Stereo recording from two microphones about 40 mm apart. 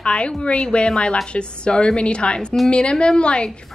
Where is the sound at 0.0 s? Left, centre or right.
Left.